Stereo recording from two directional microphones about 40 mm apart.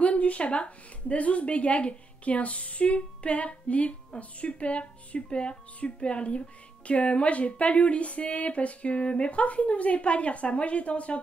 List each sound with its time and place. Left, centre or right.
0.0 s speech: left